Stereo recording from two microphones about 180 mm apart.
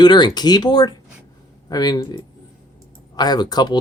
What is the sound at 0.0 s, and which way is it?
Speech, 25° left (ahead or behind).